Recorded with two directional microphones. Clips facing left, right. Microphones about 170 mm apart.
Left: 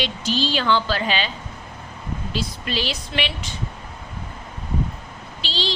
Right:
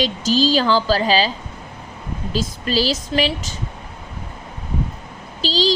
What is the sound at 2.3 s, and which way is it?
A woman's voice, 40° right (ahead or behind).